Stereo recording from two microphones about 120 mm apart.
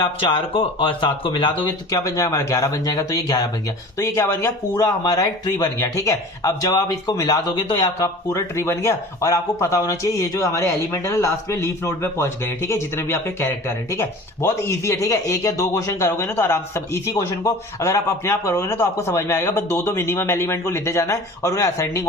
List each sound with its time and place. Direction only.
0.2 s speech: 50° left (ahead or behind)
1.9 s speech: 30° left (ahead or behind)